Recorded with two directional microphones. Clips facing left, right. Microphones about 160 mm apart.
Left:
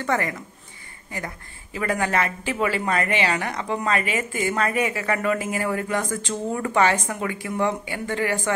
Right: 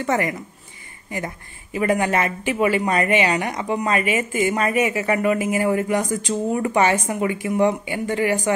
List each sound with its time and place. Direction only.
0.0 s speech: 20° right (ahead or behind)